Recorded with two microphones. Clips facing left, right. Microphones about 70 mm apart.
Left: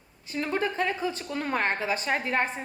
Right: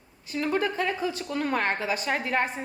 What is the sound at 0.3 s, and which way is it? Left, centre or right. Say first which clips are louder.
A woman's voice: right 2 dB; left.